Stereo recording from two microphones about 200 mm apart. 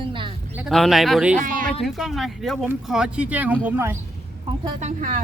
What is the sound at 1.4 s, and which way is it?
Speech, 40° right (ahead or behind).